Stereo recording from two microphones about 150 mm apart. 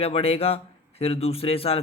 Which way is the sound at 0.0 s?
40° left (ahead or behind).